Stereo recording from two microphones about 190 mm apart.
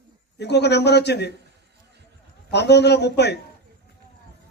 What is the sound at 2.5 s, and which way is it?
Speech, 60° left (ahead or behind).